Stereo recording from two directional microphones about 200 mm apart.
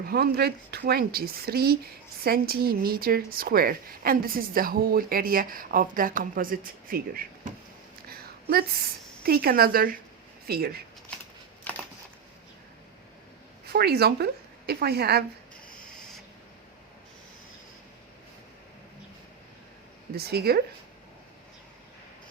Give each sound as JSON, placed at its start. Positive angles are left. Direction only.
{"t": 0.1, "sound": "a woman's voice", "side_deg": -50}
{"t": 8.1, "sound": "a sound", "side_deg": -50}
{"t": 9.2, "sound": "a woman's voice", "side_deg": -50}
{"t": 13.7, "sound": "a woman's voice", "side_deg": -50}
{"t": 20.1, "sound": "a woman's voice", "side_deg": -50}